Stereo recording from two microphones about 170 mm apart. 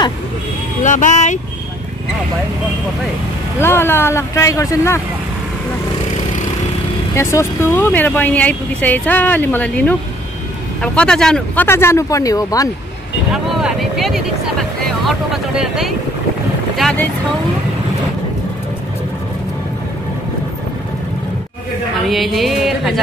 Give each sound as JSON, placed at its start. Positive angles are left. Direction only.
{"t": 0.8, "sound": "speech", "side_deg": 45}
{"t": 3.5, "sound": "speech", "side_deg": 15}
{"t": 7.2, "sound": "speech", "side_deg": 15}
{"t": 13.3, "sound": "music", "side_deg": -5}
{"t": 22.0, "sound": "music", "side_deg": 0}